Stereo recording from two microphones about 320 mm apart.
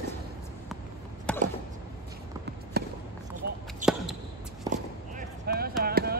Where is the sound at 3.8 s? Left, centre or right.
Right.